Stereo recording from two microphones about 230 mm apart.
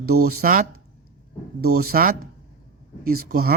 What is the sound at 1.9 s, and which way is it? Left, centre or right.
Speech, right.